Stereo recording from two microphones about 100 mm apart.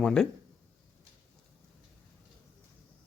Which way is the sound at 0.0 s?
5° left (ahead or behind).